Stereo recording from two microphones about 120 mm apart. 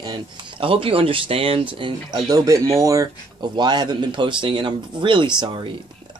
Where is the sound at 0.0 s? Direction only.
45° right (ahead or behind).